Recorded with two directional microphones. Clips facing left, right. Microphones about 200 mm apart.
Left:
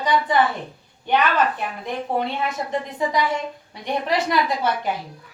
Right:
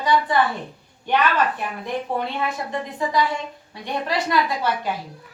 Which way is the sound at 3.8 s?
15° left (ahead or behind).